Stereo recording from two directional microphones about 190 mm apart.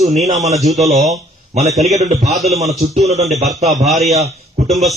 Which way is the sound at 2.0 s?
35° right (ahead or behind).